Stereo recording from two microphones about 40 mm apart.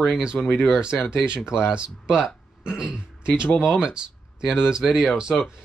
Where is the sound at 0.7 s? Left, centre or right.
Right.